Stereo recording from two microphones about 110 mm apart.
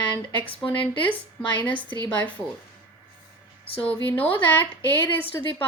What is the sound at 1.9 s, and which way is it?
Speech, 45° right (ahead or behind).